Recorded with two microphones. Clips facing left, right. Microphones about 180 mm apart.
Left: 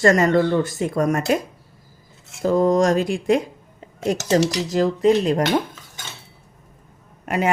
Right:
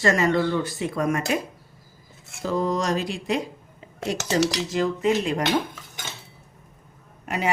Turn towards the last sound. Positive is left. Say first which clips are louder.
# left 5 dB
turn(degrees=50)  # may be behind; listen again after turning